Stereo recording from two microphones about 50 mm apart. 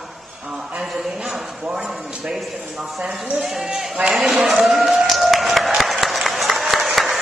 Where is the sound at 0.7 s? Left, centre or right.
Centre.